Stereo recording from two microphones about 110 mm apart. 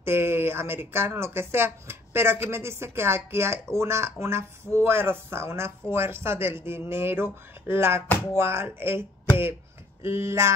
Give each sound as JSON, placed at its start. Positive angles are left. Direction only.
{"t": 0.0, "sound": "speech", "side_deg": -20}